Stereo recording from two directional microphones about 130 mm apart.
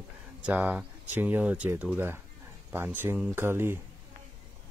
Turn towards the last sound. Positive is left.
turn(degrees=-20)  # may be behind; listen again after turning